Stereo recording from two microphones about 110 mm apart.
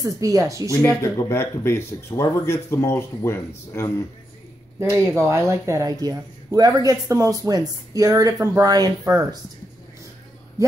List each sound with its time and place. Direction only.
0.0 s speech: 30° right (ahead or behind)
0.8 s speech: 25° left (ahead or behind)
4.7 s speech: 25° right (ahead or behind)